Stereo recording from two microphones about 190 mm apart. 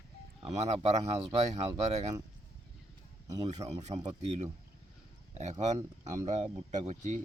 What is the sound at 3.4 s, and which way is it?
Speech, 35° right (ahead or behind).